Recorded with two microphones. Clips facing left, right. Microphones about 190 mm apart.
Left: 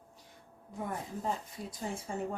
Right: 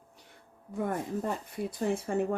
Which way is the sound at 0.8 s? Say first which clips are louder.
Right 7 dB; 60° right (ahead or behind).